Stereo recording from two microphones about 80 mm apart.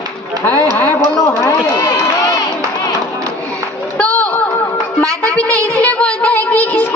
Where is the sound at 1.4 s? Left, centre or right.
Left.